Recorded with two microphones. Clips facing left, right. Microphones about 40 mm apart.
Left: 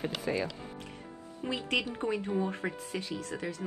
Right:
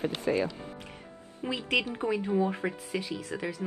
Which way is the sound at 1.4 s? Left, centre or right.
Centre.